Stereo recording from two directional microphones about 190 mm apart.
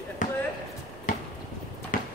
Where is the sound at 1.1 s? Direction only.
45° left (ahead or behind).